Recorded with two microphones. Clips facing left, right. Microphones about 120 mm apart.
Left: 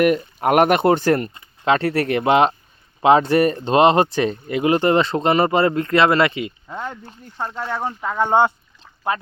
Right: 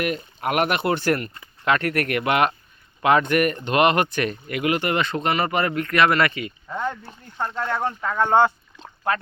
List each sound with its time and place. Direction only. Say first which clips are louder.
0.0 s speech: left 8 dB; 45° left (ahead or behind)
1.3 s speech: left 4 dB; 25° left (ahead or behind)
7.3 s speech: even; 5° left (ahead or behind)